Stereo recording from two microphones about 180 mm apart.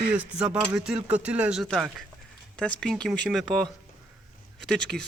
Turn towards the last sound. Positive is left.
turn(degrees=5)  # may be behind; listen again after turning